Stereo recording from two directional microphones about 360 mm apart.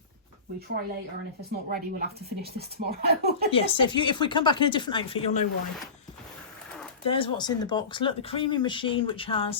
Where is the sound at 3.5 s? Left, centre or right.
Centre.